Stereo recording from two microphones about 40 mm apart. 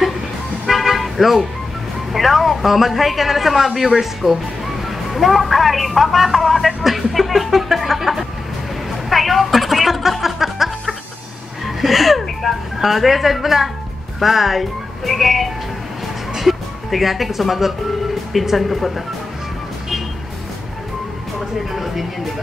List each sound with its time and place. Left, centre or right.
0.7 s toot: centre
2.1 s speech: centre
9.1 s music: centre
11.6 s a sound: centre
14.2 s speech: centre